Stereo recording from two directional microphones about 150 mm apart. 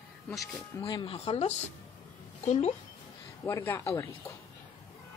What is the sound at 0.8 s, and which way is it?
A woman's voice, 35° left (ahead or behind).